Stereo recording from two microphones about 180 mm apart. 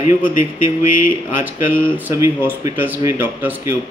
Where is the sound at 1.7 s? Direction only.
10° right (ahead or behind).